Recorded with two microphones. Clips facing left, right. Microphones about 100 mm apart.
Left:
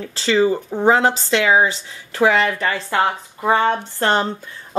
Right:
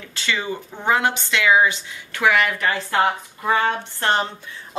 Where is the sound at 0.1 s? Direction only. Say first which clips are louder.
Left 9 dB; 35° left (ahead or behind).